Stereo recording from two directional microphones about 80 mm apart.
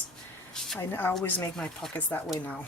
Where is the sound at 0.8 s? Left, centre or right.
Left.